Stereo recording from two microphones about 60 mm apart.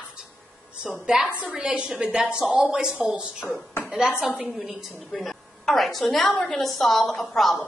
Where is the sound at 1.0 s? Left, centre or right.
Centre.